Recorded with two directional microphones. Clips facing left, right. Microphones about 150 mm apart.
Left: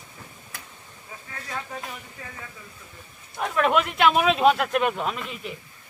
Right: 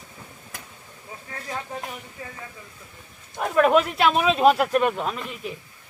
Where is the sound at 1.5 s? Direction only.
25° right (ahead or behind).